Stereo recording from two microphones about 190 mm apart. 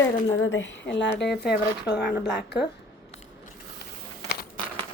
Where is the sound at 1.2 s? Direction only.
60° left (ahead or behind).